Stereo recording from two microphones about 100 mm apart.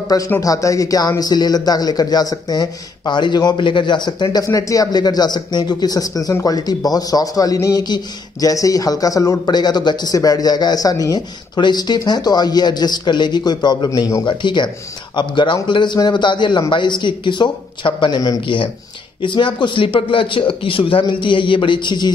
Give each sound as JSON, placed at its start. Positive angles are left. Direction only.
{"t": 0.4, "sound": "a man's voice", "side_deg": 35}
{"t": 4.5, "sound": "a man's voice", "side_deg": 35}
{"t": 14.2, "sound": "a man's voice", "side_deg": 50}
{"t": 18.4, "sound": "speech", "side_deg": 60}